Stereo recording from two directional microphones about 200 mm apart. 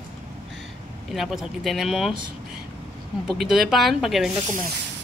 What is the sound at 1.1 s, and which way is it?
Speech, centre (ahead or behind).